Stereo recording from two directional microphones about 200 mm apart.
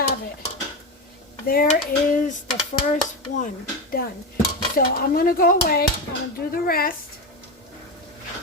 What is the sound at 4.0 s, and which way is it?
Speech, 50° left (ahead or behind).